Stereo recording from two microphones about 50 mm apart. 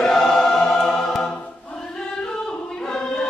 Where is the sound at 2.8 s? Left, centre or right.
Centre.